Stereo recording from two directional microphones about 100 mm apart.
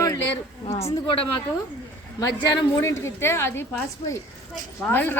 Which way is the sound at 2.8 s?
25° left (ahead or behind).